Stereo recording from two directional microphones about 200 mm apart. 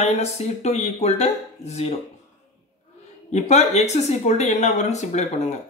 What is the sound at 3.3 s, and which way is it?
Speech, 35° left (ahead or behind).